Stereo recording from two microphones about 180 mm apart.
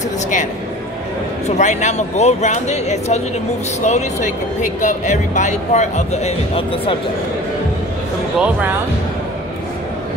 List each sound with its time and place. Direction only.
1.6 s speech: 40° left (ahead or behind)